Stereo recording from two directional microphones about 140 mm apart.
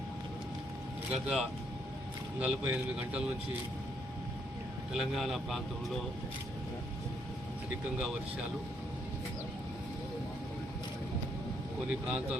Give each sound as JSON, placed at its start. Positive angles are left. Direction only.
{"t": 1.1, "sound": "a man's voice", "side_deg": -5}
{"t": 4.9, "sound": "a man's voice", "side_deg": 0}
{"t": 11.9, "sound": "a man's voice", "side_deg": -5}